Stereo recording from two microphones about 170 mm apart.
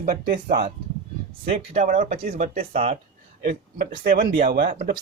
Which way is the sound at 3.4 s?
65° right (ahead or behind).